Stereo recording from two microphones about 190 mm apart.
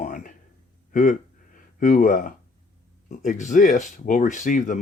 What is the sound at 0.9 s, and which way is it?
Speech, 40° left (ahead or behind).